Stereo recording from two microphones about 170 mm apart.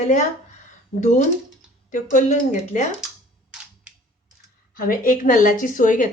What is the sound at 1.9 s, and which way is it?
Speech, 50° left (ahead or behind).